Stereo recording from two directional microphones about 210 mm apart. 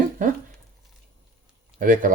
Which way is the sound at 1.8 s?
40° right (ahead or behind).